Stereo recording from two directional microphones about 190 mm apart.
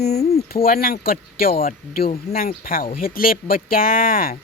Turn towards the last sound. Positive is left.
turn(degrees=50)  # may be behind; listen again after turning